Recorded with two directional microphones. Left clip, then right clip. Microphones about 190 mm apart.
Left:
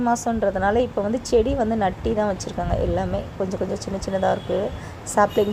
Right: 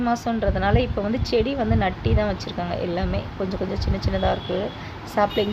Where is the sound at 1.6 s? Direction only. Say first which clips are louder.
Left 2 dB; 5° right (ahead or behind).